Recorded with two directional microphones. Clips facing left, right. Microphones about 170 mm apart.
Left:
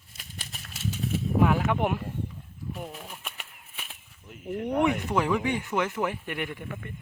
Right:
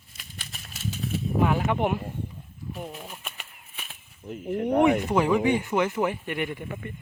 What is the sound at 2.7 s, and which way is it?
Speech, 5° right (ahead or behind).